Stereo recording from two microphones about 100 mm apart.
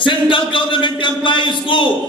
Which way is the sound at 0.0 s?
55° left (ahead or behind).